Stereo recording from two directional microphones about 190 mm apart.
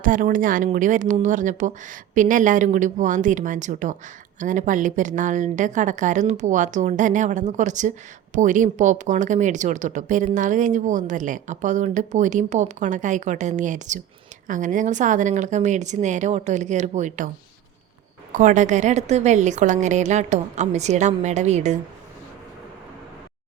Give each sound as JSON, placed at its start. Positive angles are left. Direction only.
{"t": 0.0, "sound": "a woman's voice", "side_deg": -45}
{"t": 18.3, "sound": "a woman's voice", "side_deg": -40}